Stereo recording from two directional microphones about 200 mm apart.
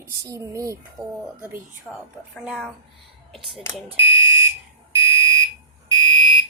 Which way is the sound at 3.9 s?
10° right (ahead or behind).